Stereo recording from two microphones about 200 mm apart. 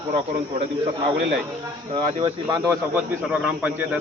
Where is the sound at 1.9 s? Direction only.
25° right (ahead or behind).